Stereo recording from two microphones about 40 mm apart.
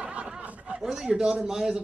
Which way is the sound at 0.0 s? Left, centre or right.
Right.